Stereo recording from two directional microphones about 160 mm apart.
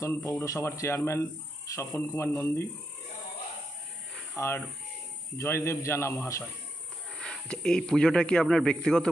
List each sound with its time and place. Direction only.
0.0 s speech: 20° left (ahead or behind)
4.4 s speech: 15° left (ahead or behind)
7.2 s a man's voice: 5° left (ahead or behind)